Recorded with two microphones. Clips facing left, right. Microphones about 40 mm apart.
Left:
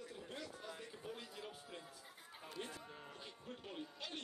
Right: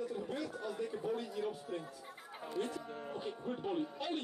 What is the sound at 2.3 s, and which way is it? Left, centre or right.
Speech, right.